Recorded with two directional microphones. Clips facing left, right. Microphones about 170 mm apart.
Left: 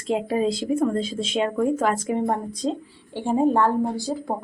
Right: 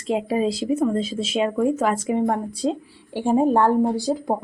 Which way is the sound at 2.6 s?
15° right (ahead or behind).